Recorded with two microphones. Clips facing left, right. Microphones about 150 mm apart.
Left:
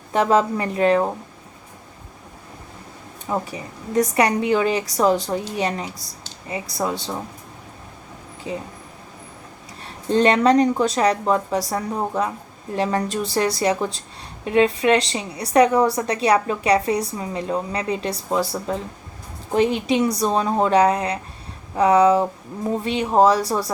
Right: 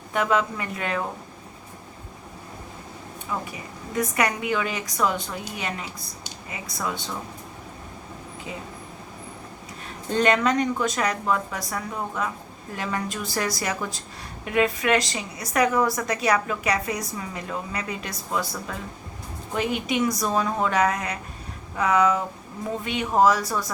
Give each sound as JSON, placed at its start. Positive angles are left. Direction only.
{"t": 0.1, "sound": "a woman's voice", "side_deg": 35}
{"t": 3.2, "sound": "a woman's voice", "side_deg": 35}
{"t": 9.8, "sound": "a woman's voice", "side_deg": 30}
{"t": 19.5, "sound": "a woman's voice", "side_deg": 30}